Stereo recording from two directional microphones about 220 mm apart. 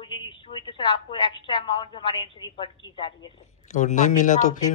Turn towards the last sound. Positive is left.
turn(degrees=35)  # may be behind; listen again after turning